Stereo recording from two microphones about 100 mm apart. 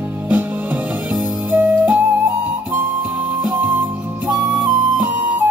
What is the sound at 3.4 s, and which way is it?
Music, 5° right (ahead or behind).